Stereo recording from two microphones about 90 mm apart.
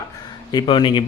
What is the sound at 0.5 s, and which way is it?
Speech, 55° left (ahead or behind).